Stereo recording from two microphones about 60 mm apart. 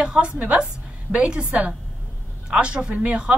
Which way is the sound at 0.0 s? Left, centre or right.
Centre.